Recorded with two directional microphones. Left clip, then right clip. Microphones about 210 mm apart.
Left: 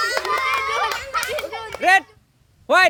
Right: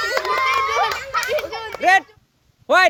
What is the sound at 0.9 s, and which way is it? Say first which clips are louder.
Children playing: right 2 dB; 5° right (ahead or behind).